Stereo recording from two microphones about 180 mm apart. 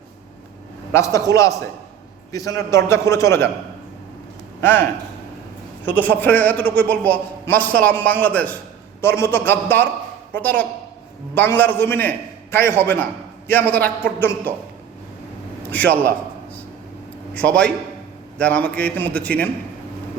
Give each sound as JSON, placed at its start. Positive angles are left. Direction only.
{"t": 0.9, "sound": "a man's voice", "side_deg": 20}
{"t": 4.6, "sound": "a man's voice", "side_deg": 10}
{"t": 15.7, "sound": "a man's voice", "side_deg": 10}
{"t": 17.3, "sound": "a man's voice", "side_deg": 5}